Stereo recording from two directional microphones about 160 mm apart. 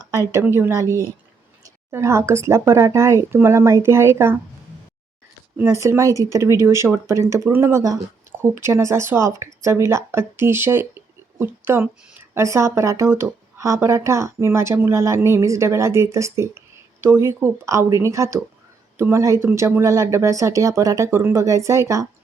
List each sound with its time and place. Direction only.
0.3 s speech: 15° right (ahead or behind)
5.5 s speech: 20° right (ahead or behind)